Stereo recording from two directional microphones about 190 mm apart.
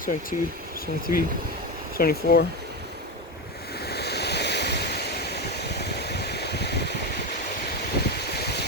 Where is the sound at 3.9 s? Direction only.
60° left (ahead or behind).